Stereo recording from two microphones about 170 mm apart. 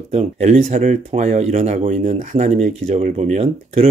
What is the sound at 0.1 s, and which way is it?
Speech, 40° right (ahead or behind).